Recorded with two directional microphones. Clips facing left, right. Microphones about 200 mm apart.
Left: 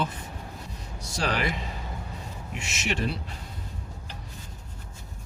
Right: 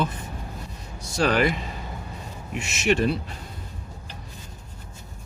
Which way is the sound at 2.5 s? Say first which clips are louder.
Right 8 dB; 50° right (ahead or behind).